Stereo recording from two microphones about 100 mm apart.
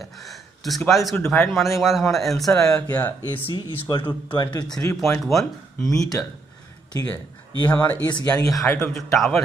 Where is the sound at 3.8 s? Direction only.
50° left (ahead or behind).